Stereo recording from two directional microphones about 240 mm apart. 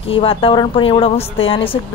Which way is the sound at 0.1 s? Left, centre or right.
Left.